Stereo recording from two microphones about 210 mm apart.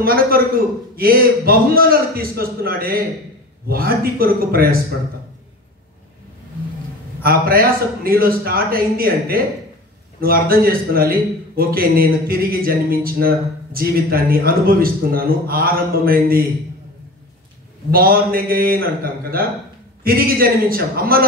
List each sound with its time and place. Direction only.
0.0 s a man's voice: 45° right (ahead or behind)
7.2 s a man's voice: 45° right (ahead or behind)
17.9 s a man's voice: 45° right (ahead or behind)